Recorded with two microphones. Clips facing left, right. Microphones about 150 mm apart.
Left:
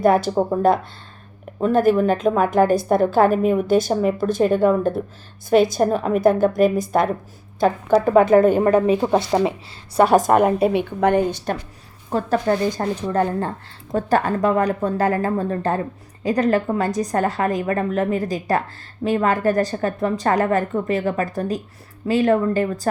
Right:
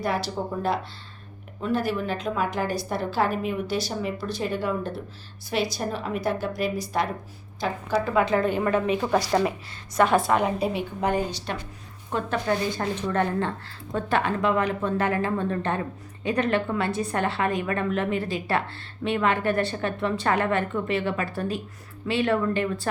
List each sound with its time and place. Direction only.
0.0 s a woman's voice: 50° left (ahead or behind)
12.1 s a woman's voice: 40° left (ahead or behind)